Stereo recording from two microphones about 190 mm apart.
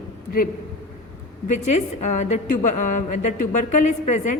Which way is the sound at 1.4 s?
40° left (ahead or behind).